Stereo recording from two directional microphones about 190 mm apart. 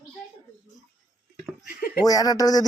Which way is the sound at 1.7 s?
50° left (ahead or behind).